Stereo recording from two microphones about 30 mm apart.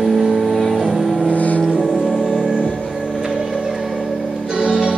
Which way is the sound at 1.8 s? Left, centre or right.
Centre.